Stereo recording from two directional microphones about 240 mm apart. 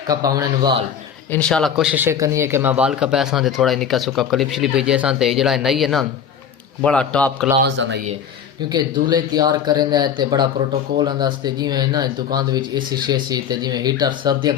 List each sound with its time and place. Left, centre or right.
0.1 s speech: centre
1.3 s speech: centre
7.6 s speech: right
8.7 s speech: centre